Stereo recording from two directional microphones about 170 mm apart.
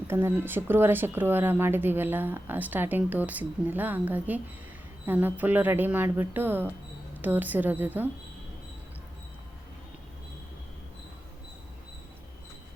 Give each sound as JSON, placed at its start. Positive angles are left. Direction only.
{"t": 0.1, "sound": "speech", "side_deg": -15}